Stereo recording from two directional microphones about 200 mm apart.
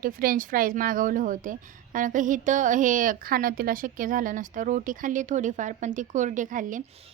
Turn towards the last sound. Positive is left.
turn(degrees=-40)  # may be behind; listen again after turning